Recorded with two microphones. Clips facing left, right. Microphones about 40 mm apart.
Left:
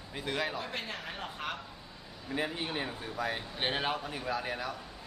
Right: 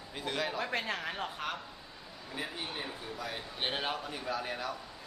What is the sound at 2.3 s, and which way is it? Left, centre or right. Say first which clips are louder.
Speech: left 5 dB; left.